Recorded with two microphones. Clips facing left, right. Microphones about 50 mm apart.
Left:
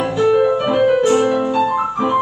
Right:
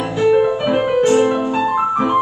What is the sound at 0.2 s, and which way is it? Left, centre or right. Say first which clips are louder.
Music: even; centre.